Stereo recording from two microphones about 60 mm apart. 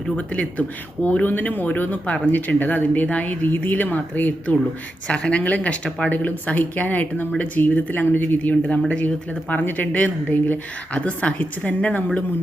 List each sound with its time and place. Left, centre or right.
0.2 s speech: left
5.0 s speech: centre